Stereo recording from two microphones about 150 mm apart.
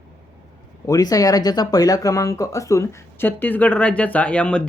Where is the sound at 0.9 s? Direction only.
25° left (ahead or behind).